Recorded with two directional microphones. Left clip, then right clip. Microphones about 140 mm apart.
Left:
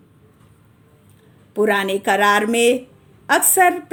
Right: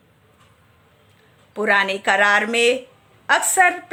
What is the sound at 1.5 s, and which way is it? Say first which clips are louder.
A woman's voice: even; 25° left (ahead or behind).